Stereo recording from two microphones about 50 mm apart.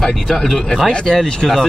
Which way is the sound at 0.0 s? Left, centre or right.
Centre.